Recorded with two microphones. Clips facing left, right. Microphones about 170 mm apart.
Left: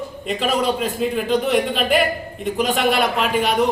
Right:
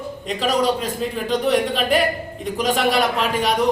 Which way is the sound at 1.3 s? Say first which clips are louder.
Right 2 dB; centre (ahead or behind).